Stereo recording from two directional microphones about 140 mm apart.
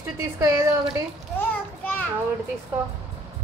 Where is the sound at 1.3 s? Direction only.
10° left (ahead or behind).